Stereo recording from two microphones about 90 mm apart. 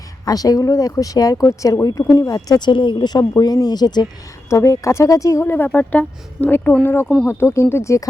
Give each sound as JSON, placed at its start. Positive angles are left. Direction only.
{"t": 0.3, "sound": "speech", "side_deg": 45}
{"t": 2.6, "sound": "speech", "side_deg": 60}
{"t": 4.4, "sound": "speech", "side_deg": 35}